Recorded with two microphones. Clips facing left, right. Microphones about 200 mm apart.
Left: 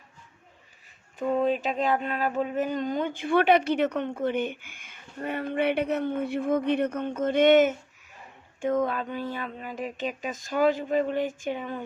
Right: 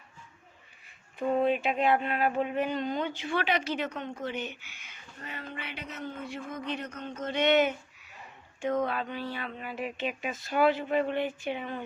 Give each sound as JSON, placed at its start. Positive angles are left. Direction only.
{"t": 1.4, "sound": "speech", "side_deg": 40}